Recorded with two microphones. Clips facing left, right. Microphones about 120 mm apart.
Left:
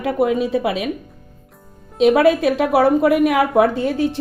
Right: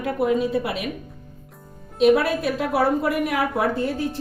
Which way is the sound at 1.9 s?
90° left.